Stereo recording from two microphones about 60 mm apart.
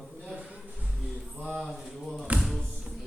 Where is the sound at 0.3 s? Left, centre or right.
Centre.